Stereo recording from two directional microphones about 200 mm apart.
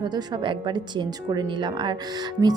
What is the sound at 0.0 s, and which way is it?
A woman's voice, 20° right (ahead or behind).